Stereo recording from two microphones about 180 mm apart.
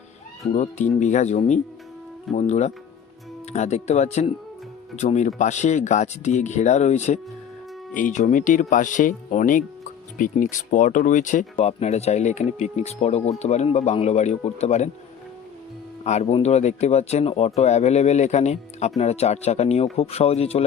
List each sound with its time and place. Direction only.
0.5 s speech: 40° left (ahead or behind)
16.0 s speech: 35° left (ahead or behind)